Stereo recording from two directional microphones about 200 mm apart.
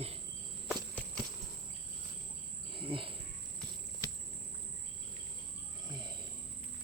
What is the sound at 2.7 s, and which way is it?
Cricket, 25° right (ahead or behind).